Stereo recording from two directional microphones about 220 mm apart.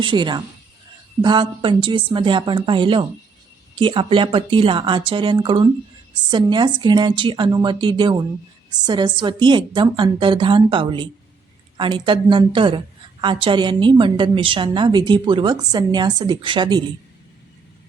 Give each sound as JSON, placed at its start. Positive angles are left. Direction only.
{"t": 0.0, "sound": "a woman's voice", "side_deg": -20}